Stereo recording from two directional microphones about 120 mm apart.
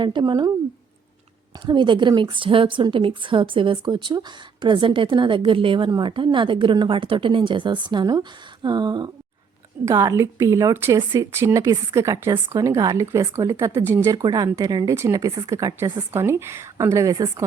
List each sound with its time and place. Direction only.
0.0 s a woman's voice: 40° right (ahead or behind)
1.6 s a woman's voice: 40° right (ahead or behind)